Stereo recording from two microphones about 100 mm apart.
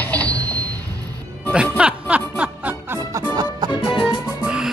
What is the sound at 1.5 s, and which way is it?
Music, 10° right (ahead or behind).